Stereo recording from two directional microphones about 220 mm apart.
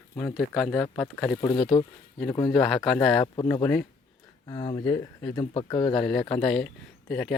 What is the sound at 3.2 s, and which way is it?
Speech, 20° left (ahead or behind).